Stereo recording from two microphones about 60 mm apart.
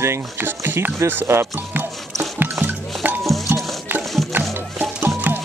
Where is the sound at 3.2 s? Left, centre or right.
Centre.